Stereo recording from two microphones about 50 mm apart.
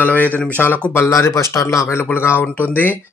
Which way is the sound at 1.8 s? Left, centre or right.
Left.